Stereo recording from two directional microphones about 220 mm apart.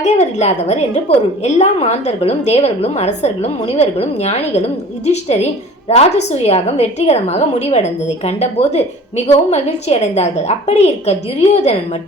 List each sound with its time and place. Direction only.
0.0 s a woman's voice: 30° left (ahead or behind)